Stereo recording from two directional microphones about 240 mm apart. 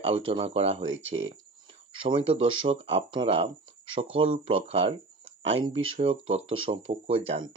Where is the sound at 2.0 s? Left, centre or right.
Right.